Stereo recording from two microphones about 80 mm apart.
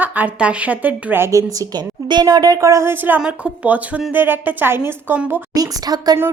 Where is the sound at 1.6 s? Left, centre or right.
Right.